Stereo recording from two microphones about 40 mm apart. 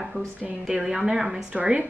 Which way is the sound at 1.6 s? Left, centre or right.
Right.